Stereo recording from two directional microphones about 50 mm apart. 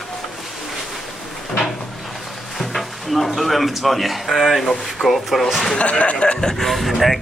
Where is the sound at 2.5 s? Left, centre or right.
Centre.